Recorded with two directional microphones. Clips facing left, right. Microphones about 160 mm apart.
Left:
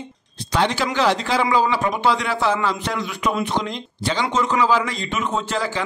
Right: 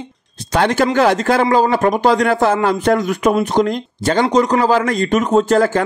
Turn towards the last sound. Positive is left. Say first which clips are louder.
# right 11 dB
turn(degrees=-45)  # may be behind; listen again after turning